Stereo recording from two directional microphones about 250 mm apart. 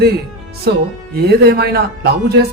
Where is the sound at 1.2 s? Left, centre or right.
Right.